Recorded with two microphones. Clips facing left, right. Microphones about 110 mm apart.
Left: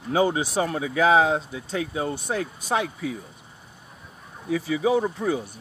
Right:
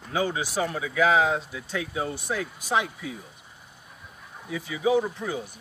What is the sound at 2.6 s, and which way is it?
Speech, 50° left (ahead or behind).